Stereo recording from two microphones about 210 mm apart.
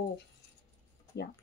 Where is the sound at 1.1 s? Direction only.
55° left (ahead or behind).